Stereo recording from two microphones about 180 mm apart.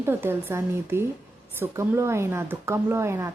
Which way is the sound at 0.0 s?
10° right (ahead or behind).